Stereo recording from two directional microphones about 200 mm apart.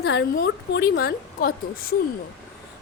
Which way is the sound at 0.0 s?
55° left (ahead or behind).